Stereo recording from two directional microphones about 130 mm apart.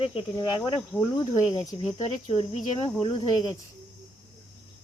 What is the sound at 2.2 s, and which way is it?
Cricket, 55° left (ahead or behind).